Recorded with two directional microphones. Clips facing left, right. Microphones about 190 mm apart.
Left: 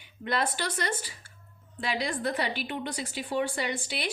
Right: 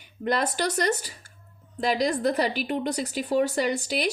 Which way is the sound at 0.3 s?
40° right (ahead or behind).